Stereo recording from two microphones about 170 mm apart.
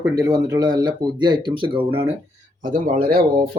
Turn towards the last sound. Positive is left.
turn(degrees=-60)  # may be behind; listen again after turning